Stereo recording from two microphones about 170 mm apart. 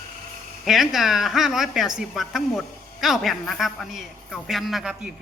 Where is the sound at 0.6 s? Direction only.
Centre (ahead or behind).